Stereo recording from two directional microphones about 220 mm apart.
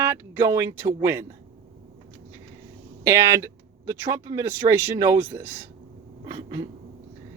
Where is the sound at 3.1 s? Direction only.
15° right (ahead or behind).